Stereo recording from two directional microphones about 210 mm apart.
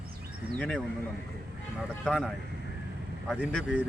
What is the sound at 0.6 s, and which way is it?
Speech, 5° left (ahead or behind).